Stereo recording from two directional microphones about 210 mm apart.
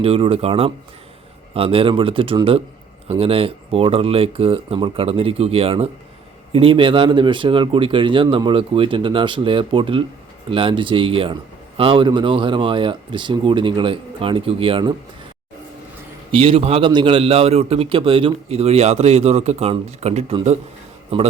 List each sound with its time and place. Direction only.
0.0 s a man's voice: 25° right (ahead or behind)
16.3 s a man's voice: 25° right (ahead or behind)